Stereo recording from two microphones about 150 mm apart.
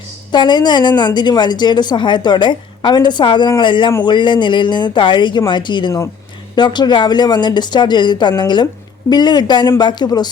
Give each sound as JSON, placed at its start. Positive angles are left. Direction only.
{"t": 0.3, "sound": "a woman's voice", "side_deg": 30}